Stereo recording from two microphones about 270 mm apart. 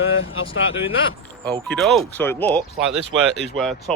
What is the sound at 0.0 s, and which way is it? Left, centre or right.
Speech, left.